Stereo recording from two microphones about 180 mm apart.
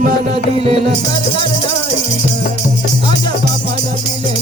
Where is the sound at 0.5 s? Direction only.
35° right (ahead or behind).